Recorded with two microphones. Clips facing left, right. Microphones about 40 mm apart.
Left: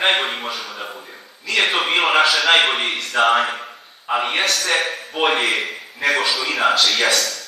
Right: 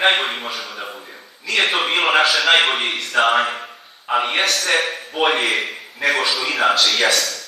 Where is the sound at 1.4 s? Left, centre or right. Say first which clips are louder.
Even; right.